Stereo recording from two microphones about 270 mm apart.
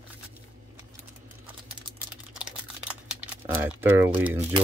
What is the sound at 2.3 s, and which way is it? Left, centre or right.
Speech, centre.